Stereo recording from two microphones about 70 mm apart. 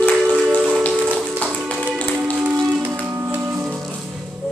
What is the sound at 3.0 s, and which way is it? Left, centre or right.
Music, right.